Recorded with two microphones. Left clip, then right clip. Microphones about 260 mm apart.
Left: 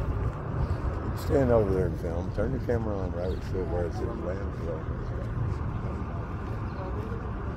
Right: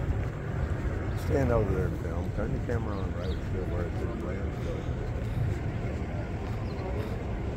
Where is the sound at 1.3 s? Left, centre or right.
Left.